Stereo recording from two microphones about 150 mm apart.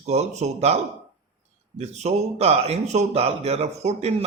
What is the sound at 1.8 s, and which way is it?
Speech, 45° right (ahead or behind).